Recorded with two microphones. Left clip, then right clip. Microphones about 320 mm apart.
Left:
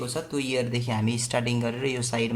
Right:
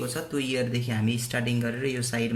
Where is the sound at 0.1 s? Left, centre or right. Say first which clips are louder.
Left 1 dB; centre.